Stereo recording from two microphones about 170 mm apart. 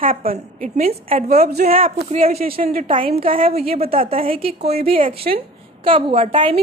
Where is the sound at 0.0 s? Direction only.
60° right (ahead or behind).